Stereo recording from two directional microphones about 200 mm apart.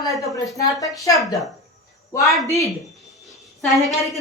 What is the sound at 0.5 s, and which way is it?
Speech, 15° left (ahead or behind).